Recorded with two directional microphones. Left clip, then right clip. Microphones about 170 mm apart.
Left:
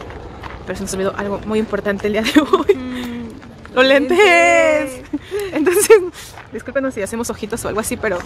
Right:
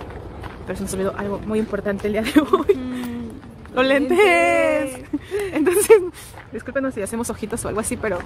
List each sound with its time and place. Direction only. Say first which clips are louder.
0.9 s speech: left 4 dB; 15° left (ahead or behind)
4.8 s speech: left 2 dB; 20° right (ahead or behind)
5.5 s speech: left 3 dB; centre (ahead or behind)